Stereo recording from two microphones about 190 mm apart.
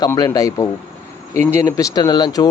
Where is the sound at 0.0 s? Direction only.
20° left (ahead or behind).